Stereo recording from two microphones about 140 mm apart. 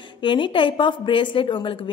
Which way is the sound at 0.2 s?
35° left (ahead or behind).